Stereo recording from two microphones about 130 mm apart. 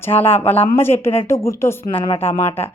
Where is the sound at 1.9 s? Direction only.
45° left (ahead or behind).